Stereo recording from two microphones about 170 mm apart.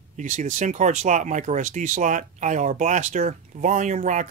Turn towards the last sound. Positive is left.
turn(degrees=-45)  # may be behind; listen again after turning